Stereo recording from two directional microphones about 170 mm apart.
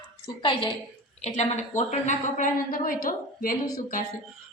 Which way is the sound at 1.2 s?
40° left (ahead or behind).